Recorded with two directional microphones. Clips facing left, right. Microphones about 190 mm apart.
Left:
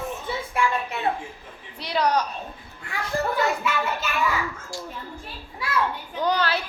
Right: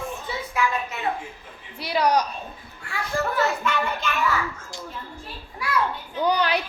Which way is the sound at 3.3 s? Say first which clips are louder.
Even; 10° left (ahead or behind).